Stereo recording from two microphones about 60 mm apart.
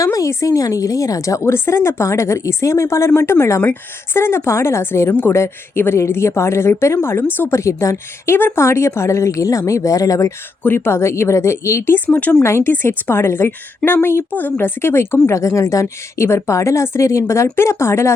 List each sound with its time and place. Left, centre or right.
0.0 s a sound: left
0.4 s a woman's voice: left
7.6 s a woman's voice: left
10.6 s a woman's voice: left
11.9 s speech: left
12.4 s a woman's voice: left
12.7 s a woman's voice: left
15.3 s a woman's voice: left